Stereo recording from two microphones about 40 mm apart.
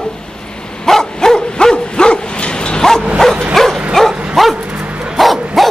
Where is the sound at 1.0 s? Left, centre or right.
Centre.